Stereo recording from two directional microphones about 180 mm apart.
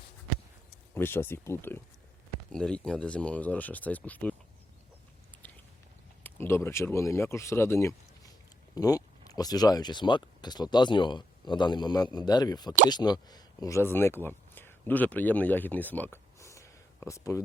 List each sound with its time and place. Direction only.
0.9 s speech: 10° left (ahead or behind)
6.2 s speech: 10° left (ahead or behind)